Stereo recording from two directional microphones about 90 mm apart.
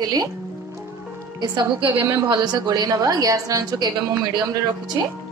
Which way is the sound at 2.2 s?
50° right (ahead or behind).